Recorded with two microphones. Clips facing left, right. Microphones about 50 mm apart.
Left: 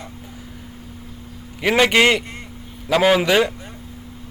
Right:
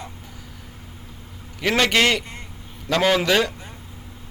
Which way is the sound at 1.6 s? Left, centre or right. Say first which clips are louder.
Left 4 dB; centre.